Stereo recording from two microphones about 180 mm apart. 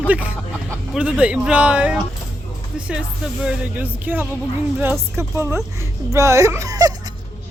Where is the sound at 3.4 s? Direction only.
10° right (ahead or behind).